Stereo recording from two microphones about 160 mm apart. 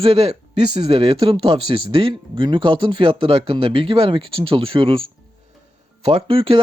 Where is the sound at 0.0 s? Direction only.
40° right (ahead or behind).